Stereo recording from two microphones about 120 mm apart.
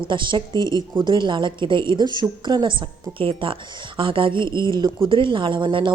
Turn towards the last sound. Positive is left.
turn(degrees=-45)  # may be behind; listen again after turning